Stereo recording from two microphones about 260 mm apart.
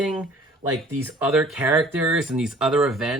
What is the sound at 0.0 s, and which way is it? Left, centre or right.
Speech, centre.